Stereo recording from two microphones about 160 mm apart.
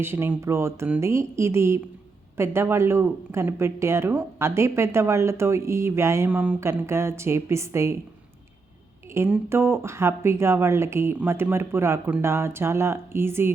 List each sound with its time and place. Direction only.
0.0 s speech: 15° right (ahead or behind)
9.1 s speech: 15° right (ahead or behind)